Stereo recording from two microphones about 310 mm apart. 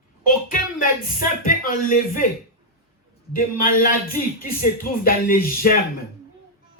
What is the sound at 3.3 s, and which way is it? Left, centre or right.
Speech, left.